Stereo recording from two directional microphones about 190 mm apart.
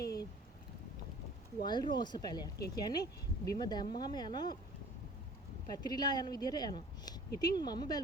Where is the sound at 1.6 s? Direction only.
20° left (ahead or behind).